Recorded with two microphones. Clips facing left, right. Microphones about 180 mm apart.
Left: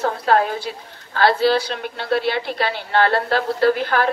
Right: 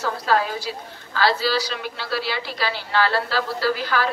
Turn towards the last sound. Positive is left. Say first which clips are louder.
# left 5 dB
turn(degrees=55)  # may be behind; listen again after turning